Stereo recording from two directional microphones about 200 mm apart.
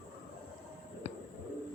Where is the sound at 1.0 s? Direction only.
30° left (ahead or behind).